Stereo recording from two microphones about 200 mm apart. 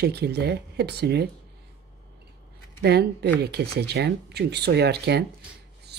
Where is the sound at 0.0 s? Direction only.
55° right (ahead or behind).